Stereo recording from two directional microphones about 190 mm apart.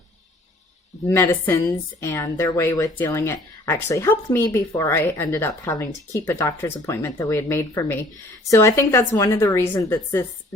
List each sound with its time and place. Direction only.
1.0 s speech: 15° left (ahead or behind)